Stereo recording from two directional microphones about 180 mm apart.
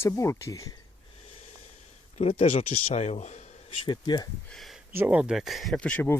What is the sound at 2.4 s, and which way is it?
Speech, 35° left (ahead or behind).